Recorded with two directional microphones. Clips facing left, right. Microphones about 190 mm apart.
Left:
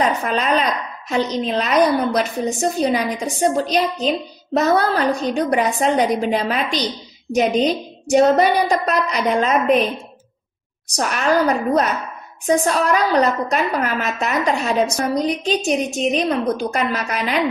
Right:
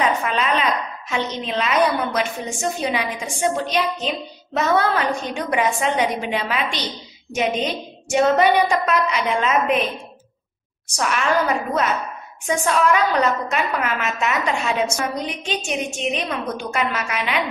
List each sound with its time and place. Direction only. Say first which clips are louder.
0.0 s a woman's voice: left 2 dB; 40° left (ahead or behind)
11.0 s a woman's voice: left 3 dB; 40° left (ahead or behind)